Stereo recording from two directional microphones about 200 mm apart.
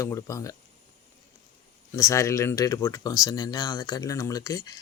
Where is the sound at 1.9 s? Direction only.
15° left (ahead or behind).